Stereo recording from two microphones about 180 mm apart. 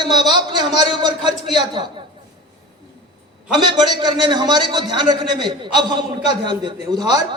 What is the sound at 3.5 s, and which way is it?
A man's voice, 25° right (ahead or behind).